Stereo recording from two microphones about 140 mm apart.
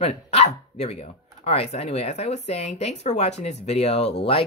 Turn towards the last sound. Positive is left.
turn(degrees=45)  # may be behind; listen again after turning